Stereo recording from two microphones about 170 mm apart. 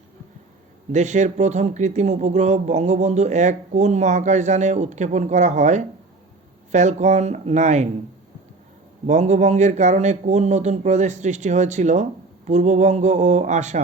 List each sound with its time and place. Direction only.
0.9 s speech: 45° right (ahead or behind)
9.0 s speech: 45° right (ahead or behind)